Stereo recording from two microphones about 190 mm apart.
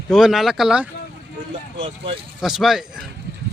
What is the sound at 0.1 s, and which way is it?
Speech, centre (ahead or behind).